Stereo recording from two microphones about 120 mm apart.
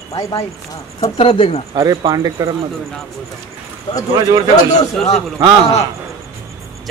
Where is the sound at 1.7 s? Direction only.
35° right (ahead or behind).